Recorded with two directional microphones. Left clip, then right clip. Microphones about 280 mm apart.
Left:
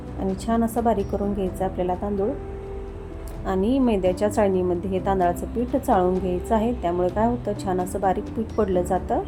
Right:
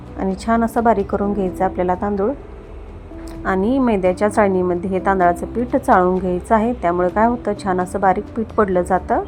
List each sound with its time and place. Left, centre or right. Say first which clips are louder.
0.2 s a woman's voice: right 6 dB; centre
3.4 s a woman's voice: right 5 dB; centre